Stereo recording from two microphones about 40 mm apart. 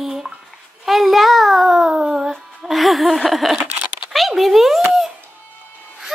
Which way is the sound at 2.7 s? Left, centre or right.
Centre.